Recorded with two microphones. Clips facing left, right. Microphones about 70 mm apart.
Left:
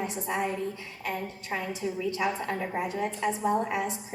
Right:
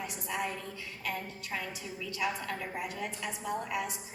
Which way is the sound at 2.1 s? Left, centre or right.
Left.